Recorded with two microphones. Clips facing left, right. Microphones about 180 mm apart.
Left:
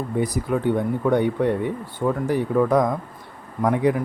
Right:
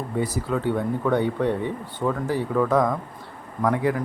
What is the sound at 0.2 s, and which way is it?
A man's voice, 15° left (ahead or behind).